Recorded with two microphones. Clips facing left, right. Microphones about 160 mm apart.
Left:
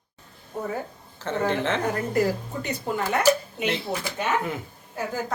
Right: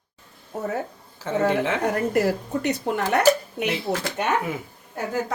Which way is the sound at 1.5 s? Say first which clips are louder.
Right 1 dB; 10° right (ahead or behind).